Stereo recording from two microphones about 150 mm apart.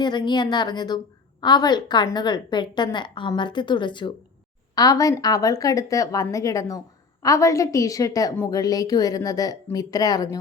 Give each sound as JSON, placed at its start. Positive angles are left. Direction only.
{"t": 0.0, "sound": "a woman's voice", "side_deg": 30}